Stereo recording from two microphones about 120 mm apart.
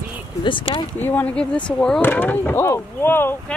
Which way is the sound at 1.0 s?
15° left (ahead or behind).